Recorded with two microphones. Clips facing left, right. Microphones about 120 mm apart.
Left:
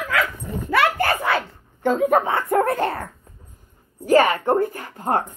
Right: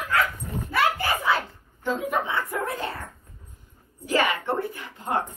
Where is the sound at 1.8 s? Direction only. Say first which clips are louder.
Left 8 dB; 50° left (ahead or behind).